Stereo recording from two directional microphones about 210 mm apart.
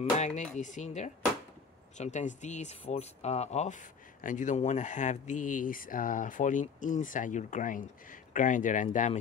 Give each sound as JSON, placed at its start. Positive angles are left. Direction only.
{"t": 0.2, "sound": "speech", "side_deg": 35}